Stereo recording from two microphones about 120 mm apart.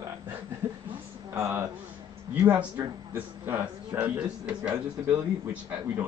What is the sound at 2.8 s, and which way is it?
Speech, 20° right (ahead or behind).